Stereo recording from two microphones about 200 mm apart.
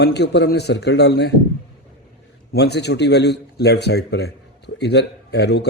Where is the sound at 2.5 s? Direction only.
55° left (ahead or behind).